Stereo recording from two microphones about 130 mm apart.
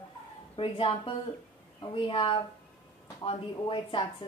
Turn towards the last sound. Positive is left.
turn(degrees=40)  # may be behind; listen again after turning